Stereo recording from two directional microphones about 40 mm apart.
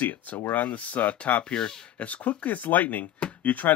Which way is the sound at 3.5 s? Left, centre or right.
Left.